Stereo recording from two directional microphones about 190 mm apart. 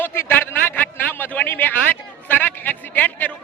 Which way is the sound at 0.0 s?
10° left (ahead or behind).